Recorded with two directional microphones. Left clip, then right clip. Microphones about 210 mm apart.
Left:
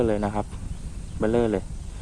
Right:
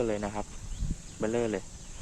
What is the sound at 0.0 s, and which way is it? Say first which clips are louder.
Speech: left 7 dB; 35° left (ahead or behind).